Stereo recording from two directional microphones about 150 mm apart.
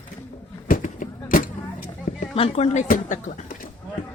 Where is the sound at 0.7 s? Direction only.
60° left (ahead or behind).